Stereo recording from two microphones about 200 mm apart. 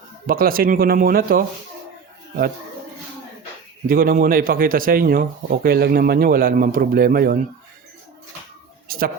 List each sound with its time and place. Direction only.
0.3 s a man's voice: 45° right (ahead or behind)
3.8 s a man's voice: 45° right (ahead or behind)
8.9 s a sound: 45° right (ahead or behind)